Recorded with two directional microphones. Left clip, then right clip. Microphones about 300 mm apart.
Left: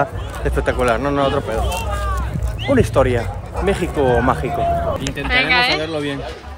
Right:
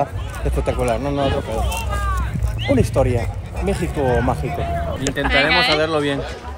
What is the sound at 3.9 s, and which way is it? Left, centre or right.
Speech, left.